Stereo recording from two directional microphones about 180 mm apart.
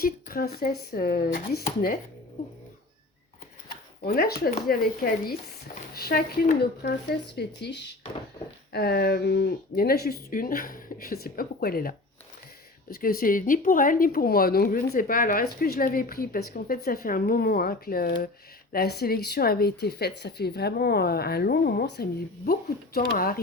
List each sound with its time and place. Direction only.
0.0 s a woman's voice: 55° left (ahead or behind)
4.0 s a woman's voice: 55° left (ahead or behind)